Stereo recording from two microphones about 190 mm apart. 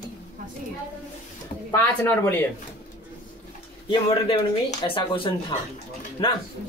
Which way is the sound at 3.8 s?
25° left (ahead or behind).